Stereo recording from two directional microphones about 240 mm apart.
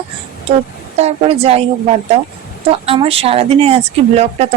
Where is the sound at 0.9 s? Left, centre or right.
Right.